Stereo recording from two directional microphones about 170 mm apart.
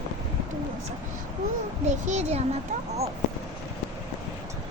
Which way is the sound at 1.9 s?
40° right (ahead or behind).